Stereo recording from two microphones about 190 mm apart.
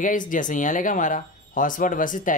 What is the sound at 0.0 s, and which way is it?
Speech, 45° left (ahead or behind).